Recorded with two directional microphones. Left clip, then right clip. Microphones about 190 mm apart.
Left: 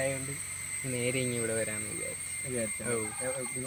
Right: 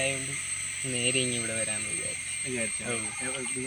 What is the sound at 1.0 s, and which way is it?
Speech, 20° left (ahead or behind).